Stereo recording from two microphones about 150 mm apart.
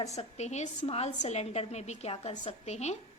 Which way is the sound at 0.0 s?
45° left (ahead or behind).